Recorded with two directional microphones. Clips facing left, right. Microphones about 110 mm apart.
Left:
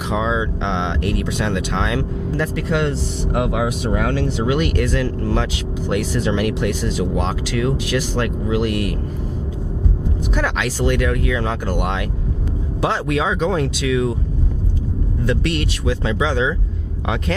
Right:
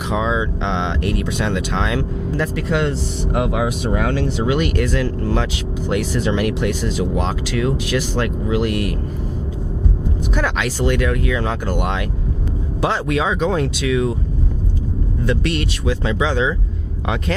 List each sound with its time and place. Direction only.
0.0 s speech: 20° right (ahead or behind)
10.3 s speech: 15° right (ahead or behind)
15.3 s speech: 10° right (ahead or behind)